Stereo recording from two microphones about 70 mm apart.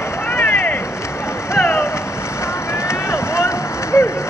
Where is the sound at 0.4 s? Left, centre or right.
Left.